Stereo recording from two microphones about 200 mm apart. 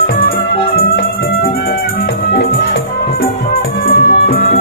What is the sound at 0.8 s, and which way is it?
Music, 45° left (ahead or behind).